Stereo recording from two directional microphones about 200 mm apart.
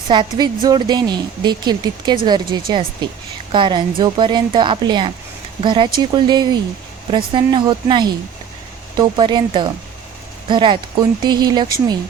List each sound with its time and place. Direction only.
0.1 s a woman's voice: 20° right (ahead or behind)